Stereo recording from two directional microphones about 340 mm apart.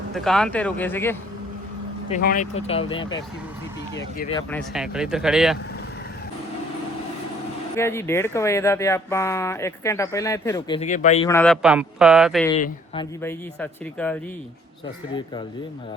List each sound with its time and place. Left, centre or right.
0.1 s a man's voice: centre
2.0 s speech: left
4.3 s speech: centre
4.7 s a man's voice: centre
7.8 s speech: centre
11.3 s a man's voice: centre
12.5 s speech: centre
13.2 s a man's voice: centre